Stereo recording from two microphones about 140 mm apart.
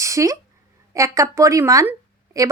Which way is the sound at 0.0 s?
20° right (ahead or behind).